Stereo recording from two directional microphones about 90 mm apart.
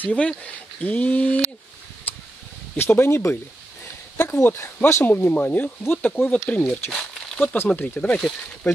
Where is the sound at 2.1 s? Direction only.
20° left (ahead or behind).